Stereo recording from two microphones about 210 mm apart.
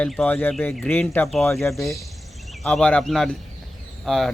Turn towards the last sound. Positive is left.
turn(degrees=0)  # may be behind; listen again after turning